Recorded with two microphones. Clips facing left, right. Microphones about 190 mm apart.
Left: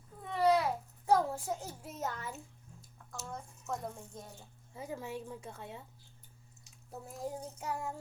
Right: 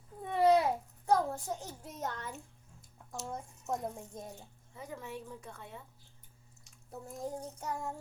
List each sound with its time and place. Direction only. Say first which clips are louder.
0.2 s babbling: right 2 dB; 20° right (ahead or behind)
1.0 s a child's voice: left 1 dB; 5° left (ahead or behind)
3.1 s a child's voice: right 3 dB; 20° right (ahead or behind)
4.7 s speech: left 3 dB; 25° left (ahead or behind)
6.9 s child singing: right 1 dB; 5° left (ahead or behind)